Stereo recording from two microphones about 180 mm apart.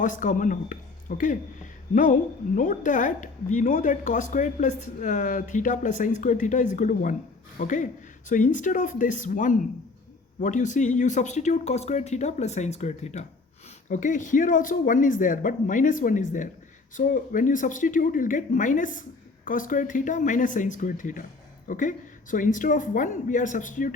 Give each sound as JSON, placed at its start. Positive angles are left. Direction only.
{"t": 0.0, "sound": "a woman's voice", "side_deg": 45}